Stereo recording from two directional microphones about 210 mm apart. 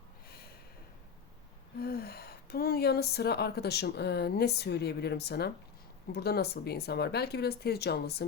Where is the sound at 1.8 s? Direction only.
45° left (ahead or behind).